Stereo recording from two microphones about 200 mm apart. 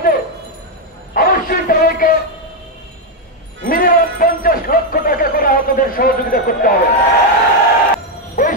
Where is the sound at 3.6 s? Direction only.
45° left (ahead or behind).